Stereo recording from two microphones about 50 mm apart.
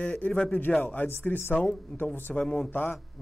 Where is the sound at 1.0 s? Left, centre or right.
Left.